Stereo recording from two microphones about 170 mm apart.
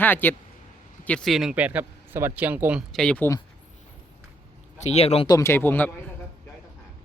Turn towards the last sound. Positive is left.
turn(degrees=10)  # may be behind; listen again after turning